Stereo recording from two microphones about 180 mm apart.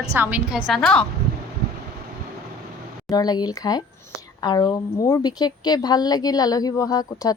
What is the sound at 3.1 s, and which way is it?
A woman's voice, 20° left (ahead or behind).